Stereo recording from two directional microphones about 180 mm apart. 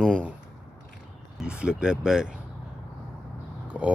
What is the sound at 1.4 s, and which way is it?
Speech, 5° right (ahead or behind).